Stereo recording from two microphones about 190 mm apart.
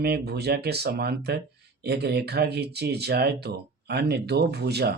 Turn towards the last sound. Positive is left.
turn(degrees=-55)  # may be behind; listen again after turning